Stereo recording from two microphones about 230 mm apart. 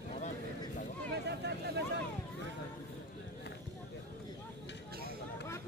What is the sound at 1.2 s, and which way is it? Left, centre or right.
Vehicle, right.